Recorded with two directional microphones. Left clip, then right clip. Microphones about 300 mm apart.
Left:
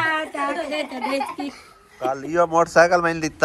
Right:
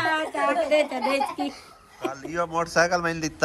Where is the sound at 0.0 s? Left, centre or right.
Right.